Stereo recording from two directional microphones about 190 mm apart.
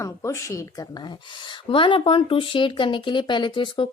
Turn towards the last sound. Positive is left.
turn(degrees=25)  # may be behind; listen again after turning